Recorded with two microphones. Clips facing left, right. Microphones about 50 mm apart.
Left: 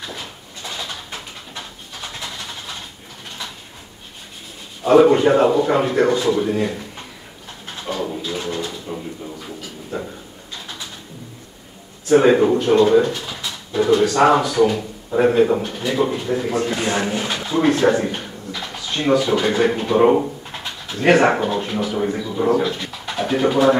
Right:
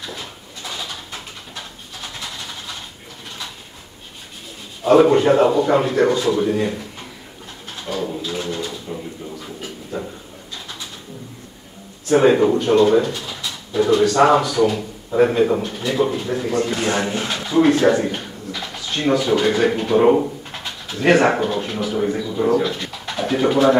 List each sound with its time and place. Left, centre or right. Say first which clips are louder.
0.0 s pigeon: even; centre
0.8 s bird: left 1 dB; centre
2.1 s vehicle: even; centre
4.8 s a man's voice: even; centre
7.7 s bird: even; centre
8.1 s bird: even; centre
9.9 s a sound: even; centre
12.2 s a man's voice: right 1 dB; centre
13.4 s a sound: right 1 dB; centre
14.6 s a man's voice: left 1 dB; centre
19.6 s speech: left 2 dB; centre